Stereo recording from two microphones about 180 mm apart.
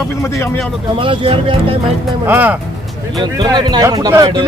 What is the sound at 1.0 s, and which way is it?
Speech, 30° right (ahead or behind).